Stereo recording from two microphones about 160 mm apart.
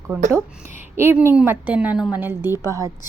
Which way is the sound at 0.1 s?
10° right (ahead or behind).